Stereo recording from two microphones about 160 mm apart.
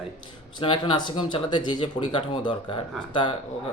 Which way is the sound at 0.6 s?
35° left (ahead or behind).